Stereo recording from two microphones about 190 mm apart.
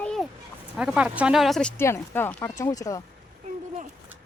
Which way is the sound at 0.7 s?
5° right (ahead or behind).